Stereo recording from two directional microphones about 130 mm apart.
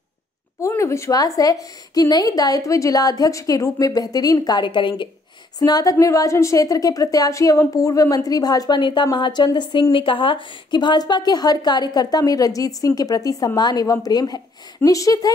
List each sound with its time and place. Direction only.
0.6 s a woman's voice: 25° left (ahead or behind)